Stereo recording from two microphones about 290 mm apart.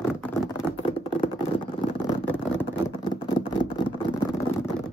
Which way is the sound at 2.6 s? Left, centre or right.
Centre.